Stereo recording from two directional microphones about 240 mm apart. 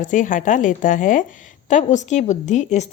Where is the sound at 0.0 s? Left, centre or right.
Left.